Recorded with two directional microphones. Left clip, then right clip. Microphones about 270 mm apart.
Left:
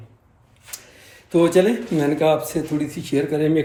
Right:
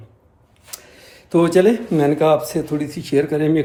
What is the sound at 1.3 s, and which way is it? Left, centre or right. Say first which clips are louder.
Speech: right 2 dB; centre.